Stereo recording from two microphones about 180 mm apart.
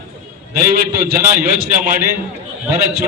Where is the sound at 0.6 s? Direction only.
55° right (ahead or behind).